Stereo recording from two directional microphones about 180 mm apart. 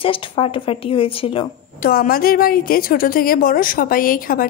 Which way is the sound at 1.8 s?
55° left (ahead or behind).